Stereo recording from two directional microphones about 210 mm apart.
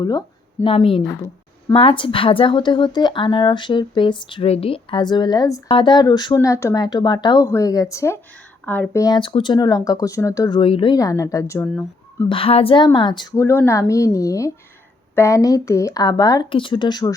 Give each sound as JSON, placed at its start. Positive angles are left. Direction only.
{"t": 0.0, "sound": "speech", "side_deg": 20}
{"t": 12.3, "sound": "speech", "side_deg": 25}